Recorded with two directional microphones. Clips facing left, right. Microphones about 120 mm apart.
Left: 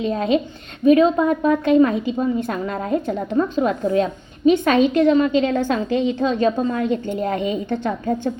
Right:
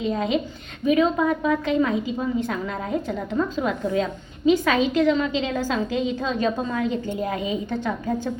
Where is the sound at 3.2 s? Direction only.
30° left (ahead or behind).